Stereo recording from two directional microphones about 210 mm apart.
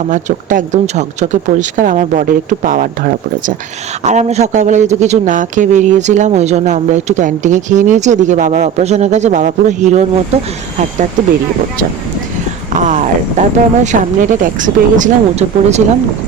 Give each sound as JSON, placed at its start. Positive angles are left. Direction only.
{"t": 0.1, "sound": "speech", "side_deg": -35}
{"t": 4.0, "sound": "speech", "side_deg": -35}
{"t": 12.8, "sound": "speech", "side_deg": -35}